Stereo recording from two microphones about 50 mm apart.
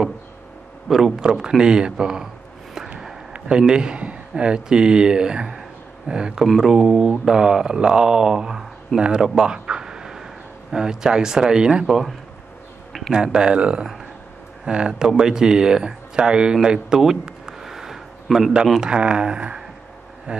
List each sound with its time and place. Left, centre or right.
0.8 s speech: centre
3.3 s speech: centre
6.4 s speech: centre
17.0 s a sound: centre
18.8 s speech: centre